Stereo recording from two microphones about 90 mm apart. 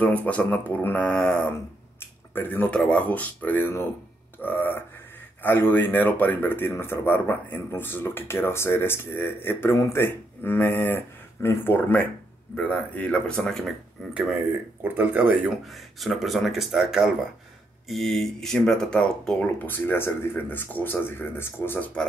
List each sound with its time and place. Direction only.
0.0 s speech: 15° left (ahead or behind)
2.0 s a sound: 20° left (ahead or behind)
2.8 s speech: 15° left (ahead or behind)
4.4 s a sound: 25° left (ahead or behind)
5.4 s speech: 25° left (ahead or behind); by 14.1 s centre (ahead or behind)
14.8 s speech: 25° right (ahead or behind)
15.6 s speech: centre (ahead or behind)
19.6 s speech: 25° left (ahead or behind)